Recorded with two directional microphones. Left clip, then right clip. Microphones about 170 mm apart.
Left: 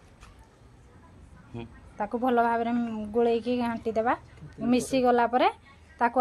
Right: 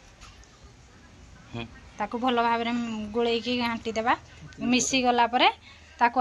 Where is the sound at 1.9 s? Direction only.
45° left (ahead or behind).